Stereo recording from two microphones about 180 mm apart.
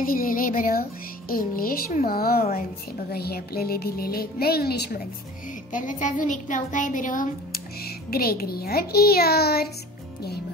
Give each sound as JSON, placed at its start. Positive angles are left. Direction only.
{"t": 0.0, "sound": "a child's voice", "side_deg": 50}
{"t": 5.7, "sound": "speech", "side_deg": 45}